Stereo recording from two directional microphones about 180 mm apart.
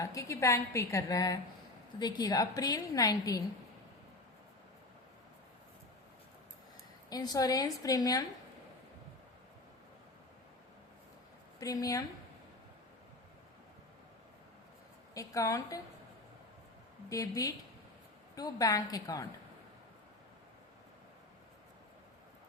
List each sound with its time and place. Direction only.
0.0 s a woman's voice: 20° left (ahead or behind)
7.1 s a woman's voice: 20° left (ahead or behind)
11.6 s a woman's voice: 20° left (ahead or behind)
15.1 s a woman's voice: 20° left (ahead or behind)
17.1 s a woman's voice: 20° left (ahead or behind)